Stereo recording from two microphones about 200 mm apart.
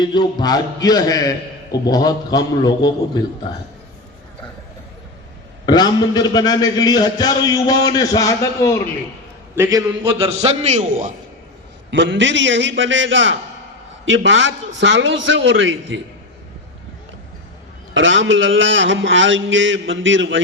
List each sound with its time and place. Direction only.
0.0 s a man's voice: 20° left (ahead or behind)
5.6 s a man's voice: 20° left (ahead or behind)
9.6 s a man's voice: 20° right (ahead or behind)
10.2 s a man's voice: 30° right (ahead or behind)
11.9 s a man's voice: 65° right (ahead or behind)
17.9 s a man's voice: 70° right (ahead or behind)